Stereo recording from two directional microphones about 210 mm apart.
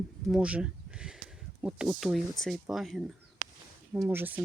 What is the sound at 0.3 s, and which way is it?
Speech, 5° right (ahead or behind).